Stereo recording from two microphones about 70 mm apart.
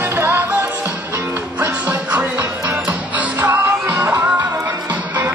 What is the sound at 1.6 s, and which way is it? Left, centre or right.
Music, right.